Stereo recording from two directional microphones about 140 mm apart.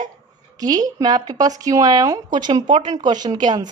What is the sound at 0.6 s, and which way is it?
A woman's voice, 25° right (ahead or behind).